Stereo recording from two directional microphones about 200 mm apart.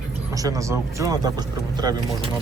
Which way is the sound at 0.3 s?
15° right (ahead or behind).